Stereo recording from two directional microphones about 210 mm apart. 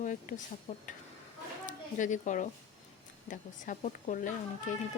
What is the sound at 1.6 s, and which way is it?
Speech, 35° left (ahead or behind).